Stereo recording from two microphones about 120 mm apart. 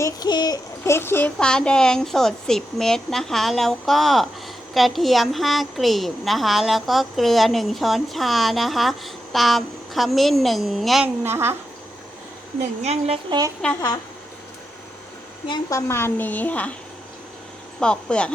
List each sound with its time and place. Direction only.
0.0 s child singing: 35° left (ahead or behind)
0.9 s a child's voice: 20° left (ahead or behind)
1.4 s speech: 5° left (ahead or behind)
11.0 s a woman's voice: 20° right (ahead or behind)
12.8 s speech: 60° right (ahead or behind)
13.6 s speech: 5° left (ahead or behind)
15.7 s a woman's voice: 20° left (ahead or behind)
17.7 s a woman's voice: 10° left (ahead or behind)